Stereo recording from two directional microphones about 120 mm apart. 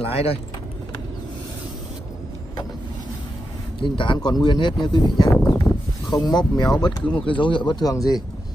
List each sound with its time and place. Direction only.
0.0 s speech: 55° left (ahead or behind)
3.8 s speech: 45° left (ahead or behind)
5.5 s a sound: 35° left (ahead or behind)
7.2 s speech: 45° left (ahead or behind)